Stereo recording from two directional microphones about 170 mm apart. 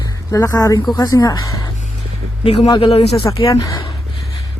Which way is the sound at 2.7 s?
30° left (ahead or behind).